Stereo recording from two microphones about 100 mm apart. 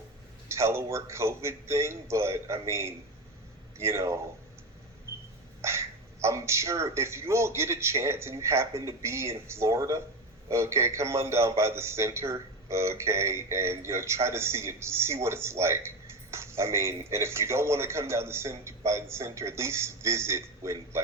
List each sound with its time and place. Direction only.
0.4 s a man's voice: 25° right (ahead or behind)
5.6 s a man's voice: 30° right (ahead or behind)